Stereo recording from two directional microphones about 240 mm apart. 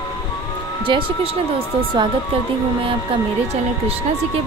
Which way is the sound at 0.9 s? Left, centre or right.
Centre.